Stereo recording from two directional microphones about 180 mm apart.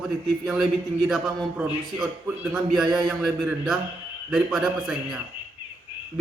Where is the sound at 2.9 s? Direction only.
Centre (ahead or behind).